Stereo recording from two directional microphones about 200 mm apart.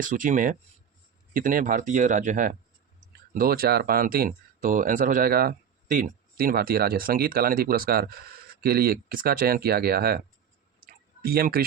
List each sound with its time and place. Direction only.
0.0 s speech: 40° right (ahead or behind)
10.8 s clicking: 45° right (ahead or behind)